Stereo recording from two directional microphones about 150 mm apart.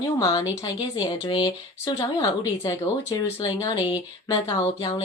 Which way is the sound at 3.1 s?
25° left (ahead or behind).